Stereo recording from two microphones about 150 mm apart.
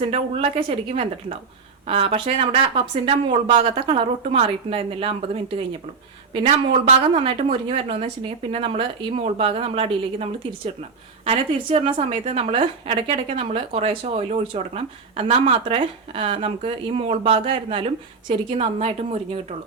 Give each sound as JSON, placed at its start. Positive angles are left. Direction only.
{"t": 0.0, "sound": "a woman's voice", "side_deg": -40}
{"t": 3.5, "sound": "a woman's voice", "side_deg": -45}
{"t": 11.3, "sound": "a woman's voice", "side_deg": -40}